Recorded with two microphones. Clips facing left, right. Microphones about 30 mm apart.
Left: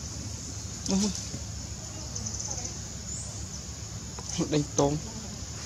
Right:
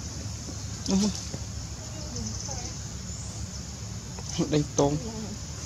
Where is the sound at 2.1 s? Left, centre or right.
Right.